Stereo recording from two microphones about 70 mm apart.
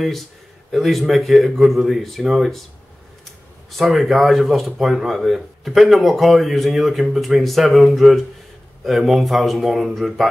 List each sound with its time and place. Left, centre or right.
0.7 s speech: centre
3.7 s speech: centre